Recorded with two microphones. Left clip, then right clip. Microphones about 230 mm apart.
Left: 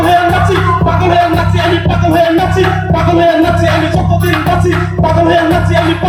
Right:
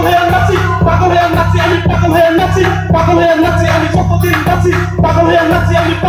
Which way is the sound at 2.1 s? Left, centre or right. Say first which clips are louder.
Right 1 dB; left.